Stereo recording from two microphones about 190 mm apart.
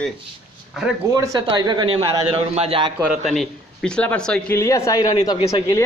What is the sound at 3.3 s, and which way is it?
A man's voice, 5° left (ahead or behind).